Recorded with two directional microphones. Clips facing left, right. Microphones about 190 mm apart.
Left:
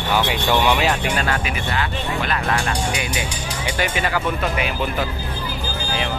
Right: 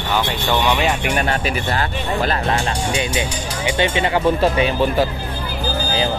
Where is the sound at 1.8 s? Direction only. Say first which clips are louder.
Right 3 dB; 30° right (ahead or behind).